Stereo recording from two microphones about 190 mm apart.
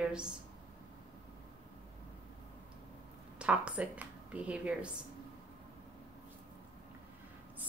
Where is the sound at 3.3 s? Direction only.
5° right (ahead or behind).